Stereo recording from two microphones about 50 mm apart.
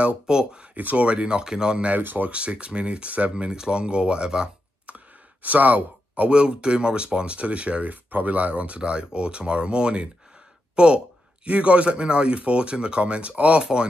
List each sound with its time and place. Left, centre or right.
0.3 s speech: centre
0.7 s speech: right; by 1.9 s centre
1.9 s speech: right
2.3 s speech: right
4.8 s speech: right